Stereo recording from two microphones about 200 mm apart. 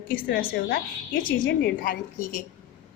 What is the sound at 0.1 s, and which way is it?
A woman's voice, 45° left (ahead or behind).